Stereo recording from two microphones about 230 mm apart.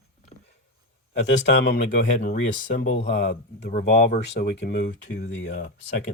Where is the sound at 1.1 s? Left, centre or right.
Left.